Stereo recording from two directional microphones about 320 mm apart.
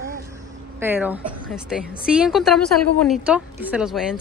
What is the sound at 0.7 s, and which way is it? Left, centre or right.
A woman's voice, centre.